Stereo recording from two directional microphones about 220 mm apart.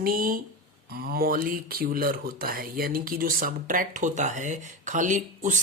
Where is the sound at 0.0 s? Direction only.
40° right (ahead or behind).